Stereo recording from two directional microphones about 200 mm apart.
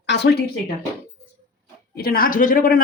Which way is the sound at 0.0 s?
60° left (ahead or behind).